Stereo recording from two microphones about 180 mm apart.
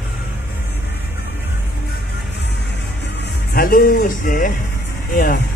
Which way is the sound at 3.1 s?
60° left (ahead or behind).